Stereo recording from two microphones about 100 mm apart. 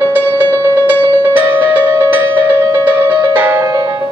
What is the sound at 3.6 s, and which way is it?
Music, 40° right (ahead or behind).